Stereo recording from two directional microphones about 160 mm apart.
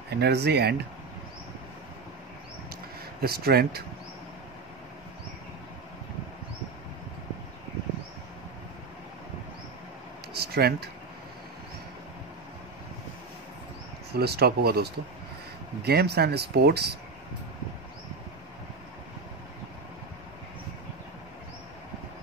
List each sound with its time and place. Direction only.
0.1 s speech: 90° right
3.2 s speech: 70° right (ahead or behind)
10.3 s a sound: 80° right
14.1 s speech: 85° right